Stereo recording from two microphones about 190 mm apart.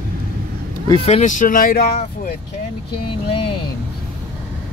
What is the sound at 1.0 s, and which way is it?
Speech, 40° left (ahead or behind).